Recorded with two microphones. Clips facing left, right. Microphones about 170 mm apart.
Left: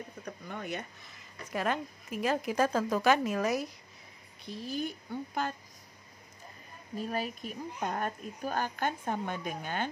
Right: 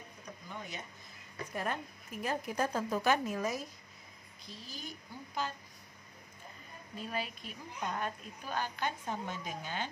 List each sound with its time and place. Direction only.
0.2 s speech: 60° left (ahead or behind)
4.5 s a woman's voice: 60° left (ahead or behind)
7.0 s speech: 45° left (ahead or behind)